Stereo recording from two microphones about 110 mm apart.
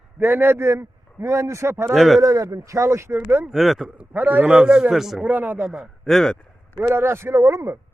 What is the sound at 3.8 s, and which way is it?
A man's voice, 15° right (ahead or behind).